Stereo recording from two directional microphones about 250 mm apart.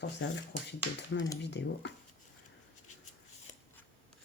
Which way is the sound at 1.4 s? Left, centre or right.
Left.